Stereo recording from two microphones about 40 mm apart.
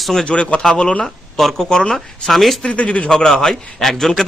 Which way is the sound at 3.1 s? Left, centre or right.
Centre.